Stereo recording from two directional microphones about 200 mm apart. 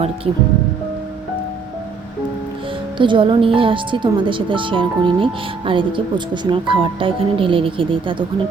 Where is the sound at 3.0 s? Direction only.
25° right (ahead or behind).